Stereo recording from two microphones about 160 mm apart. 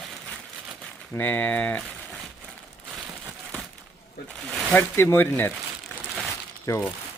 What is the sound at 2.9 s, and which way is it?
Crumpling, 5° right (ahead or behind).